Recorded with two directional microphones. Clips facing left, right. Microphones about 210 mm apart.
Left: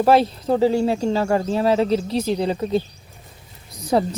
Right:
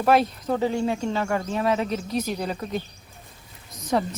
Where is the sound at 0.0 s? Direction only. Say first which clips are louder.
Left 4 dB; 30° left (ahead or behind).